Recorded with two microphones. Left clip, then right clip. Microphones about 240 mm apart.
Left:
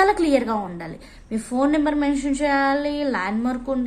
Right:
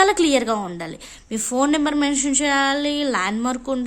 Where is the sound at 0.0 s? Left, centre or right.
Right.